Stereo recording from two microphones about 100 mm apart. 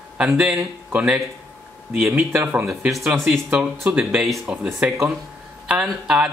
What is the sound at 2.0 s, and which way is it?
Speech, 25° right (ahead or behind).